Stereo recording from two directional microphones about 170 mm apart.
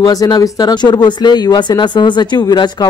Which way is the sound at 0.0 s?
20° left (ahead or behind).